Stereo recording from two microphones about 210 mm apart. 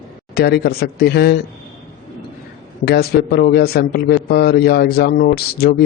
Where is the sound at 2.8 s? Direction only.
50° left (ahead or behind).